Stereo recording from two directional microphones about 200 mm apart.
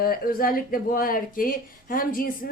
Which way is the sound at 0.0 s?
45° left (ahead or behind).